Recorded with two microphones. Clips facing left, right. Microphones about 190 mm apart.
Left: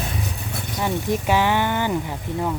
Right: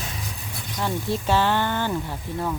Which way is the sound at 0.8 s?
15° left (ahead or behind).